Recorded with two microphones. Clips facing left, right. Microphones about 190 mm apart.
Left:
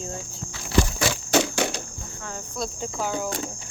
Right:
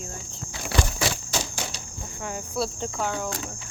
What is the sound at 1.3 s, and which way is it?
Cricket, 70° left (ahead or behind).